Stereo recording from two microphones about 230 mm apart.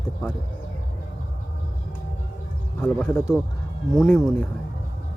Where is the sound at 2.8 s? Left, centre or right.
Centre.